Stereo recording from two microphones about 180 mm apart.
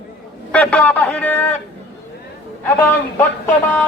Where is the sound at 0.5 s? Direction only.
10° left (ahead or behind).